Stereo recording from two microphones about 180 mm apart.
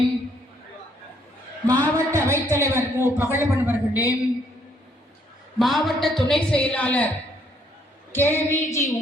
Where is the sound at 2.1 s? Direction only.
15° right (ahead or behind).